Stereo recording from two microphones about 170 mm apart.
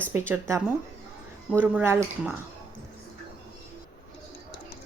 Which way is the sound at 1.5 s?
10° right (ahead or behind).